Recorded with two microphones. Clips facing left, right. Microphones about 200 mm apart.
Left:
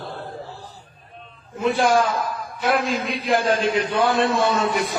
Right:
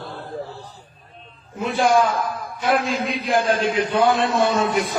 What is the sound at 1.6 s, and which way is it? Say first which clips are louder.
Speech: left 1 dB; 55° left (ahead or behind).